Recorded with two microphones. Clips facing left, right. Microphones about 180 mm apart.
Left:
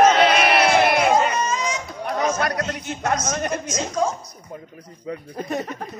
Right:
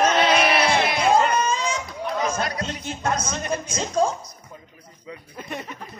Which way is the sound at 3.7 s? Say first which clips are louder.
Right 2 dB; 30° right (ahead or behind).